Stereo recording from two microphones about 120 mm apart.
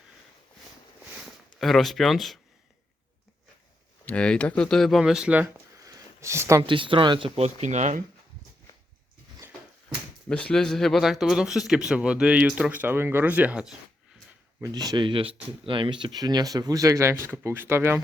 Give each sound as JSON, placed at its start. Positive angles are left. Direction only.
{"t": 1.5, "sound": "speech", "side_deg": 0}
{"t": 4.0, "sound": "speech", "side_deg": 10}
{"t": 5.8, "sound": "a sound", "side_deg": -25}
{"t": 6.6, "sound": "speech", "side_deg": -45}
{"t": 7.4, "sound": "speech", "side_deg": -70}
{"t": 10.2, "sound": "speech", "side_deg": 10}
{"t": 14.6, "sound": "speech", "side_deg": -35}